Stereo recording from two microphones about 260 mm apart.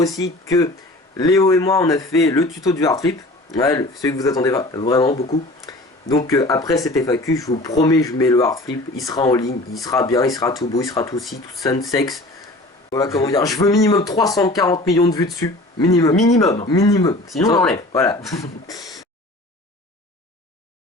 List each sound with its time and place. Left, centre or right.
0.4 s speech: centre
6.1 s speech: centre